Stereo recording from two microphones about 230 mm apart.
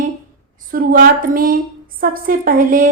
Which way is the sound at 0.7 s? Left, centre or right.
Right.